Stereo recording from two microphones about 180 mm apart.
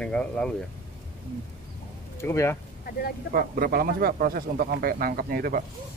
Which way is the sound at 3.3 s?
55° right (ahead or behind).